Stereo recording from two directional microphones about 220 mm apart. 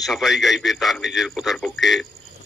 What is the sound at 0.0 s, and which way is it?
A man's voice, centre (ahead or behind).